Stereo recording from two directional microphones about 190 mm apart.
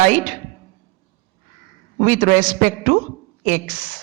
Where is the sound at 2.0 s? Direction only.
45° right (ahead or behind).